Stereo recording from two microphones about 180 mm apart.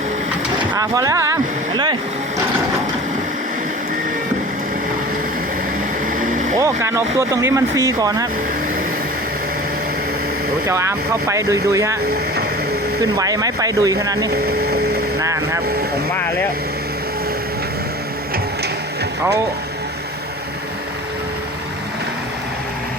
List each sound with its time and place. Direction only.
0.7 s speech: 20° right (ahead or behind)
6.1 s vehicle: 45° right (ahead or behind)
6.6 s speech: 15° right (ahead or behind)
10.7 s speech: 15° right (ahead or behind)
13.0 s speech: 20° right (ahead or behind)
16.1 s speech: 10° left (ahead or behind)